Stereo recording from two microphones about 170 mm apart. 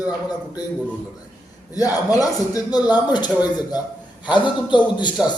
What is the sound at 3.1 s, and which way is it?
A man's voice, 25° left (ahead or behind).